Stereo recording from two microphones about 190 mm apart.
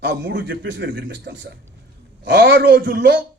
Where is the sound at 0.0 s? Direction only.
65° right (ahead or behind).